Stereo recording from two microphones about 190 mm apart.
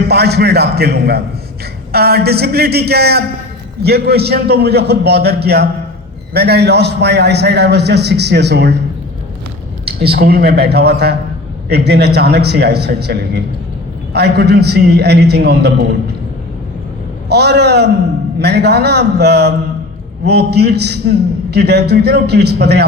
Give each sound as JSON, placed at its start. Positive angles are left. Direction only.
{"t": 0.1, "sound": "a man's voice", "side_deg": -60}
{"t": 9.8, "sound": "a man's voice", "side_deg": -55}
{"t": 17.2, "sound": "a man's voice", "side_deg": -60}